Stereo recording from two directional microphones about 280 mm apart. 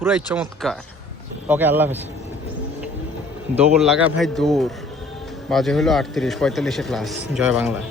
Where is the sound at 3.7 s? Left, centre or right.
Centre.